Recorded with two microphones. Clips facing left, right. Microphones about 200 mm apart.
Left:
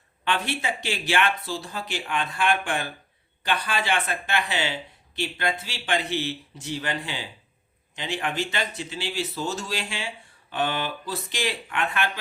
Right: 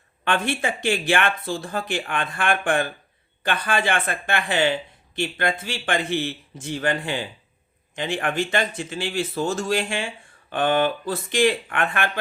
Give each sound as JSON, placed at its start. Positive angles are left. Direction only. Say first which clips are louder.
{"t": 0.3, "sound": "speech", "louder": "right 4 dB", "side_deg": -50}